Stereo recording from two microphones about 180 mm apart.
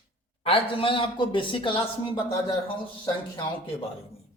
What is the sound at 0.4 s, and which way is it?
A man's voice, 30° left (ahead or behind).